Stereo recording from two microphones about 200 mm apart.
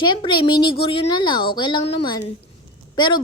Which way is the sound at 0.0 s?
25° left (ahead or behind).